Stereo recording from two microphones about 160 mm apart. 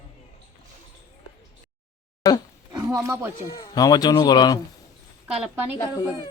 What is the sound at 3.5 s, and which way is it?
Speech, 25° left (ahead or behind).